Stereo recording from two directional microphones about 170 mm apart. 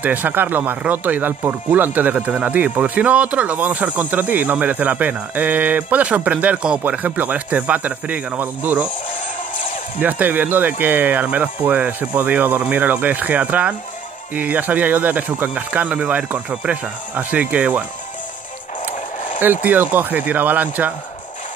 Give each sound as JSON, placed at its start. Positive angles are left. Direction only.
{"t": 0.0, "sound": "speech", "side_deg": -10}
{"t": 9.9, "sound": "speech", "side_deg": -10}
{"t": 19.6, "sound": "speech", "side_deg": -10}